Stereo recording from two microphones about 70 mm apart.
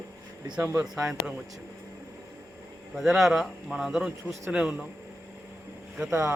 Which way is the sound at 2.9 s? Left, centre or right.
Centre.